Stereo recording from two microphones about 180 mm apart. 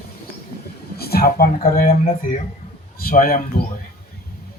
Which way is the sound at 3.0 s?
55° left (ahead or behind).